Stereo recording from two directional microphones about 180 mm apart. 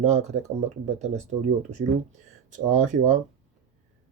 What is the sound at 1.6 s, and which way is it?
Speech, 40° right (ahead or behind).